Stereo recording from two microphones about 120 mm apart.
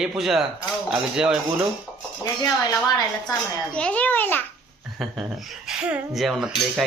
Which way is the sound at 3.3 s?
10° left (ahead or behind).